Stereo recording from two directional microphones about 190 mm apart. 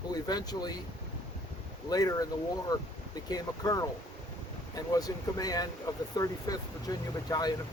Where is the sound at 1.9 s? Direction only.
20° left (ahead or behind).